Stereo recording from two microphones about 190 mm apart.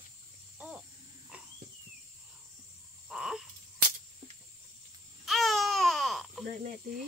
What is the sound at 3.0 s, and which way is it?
Frog, centre (ahead or behind).